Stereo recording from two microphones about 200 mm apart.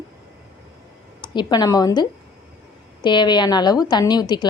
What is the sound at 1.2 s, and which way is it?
A woman's voice, 20° left (ahead or behind).